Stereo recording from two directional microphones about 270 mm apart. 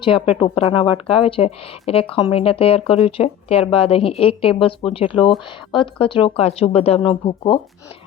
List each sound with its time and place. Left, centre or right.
0.0 s speech: centre